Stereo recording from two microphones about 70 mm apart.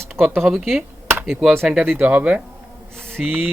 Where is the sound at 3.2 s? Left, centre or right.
Centre.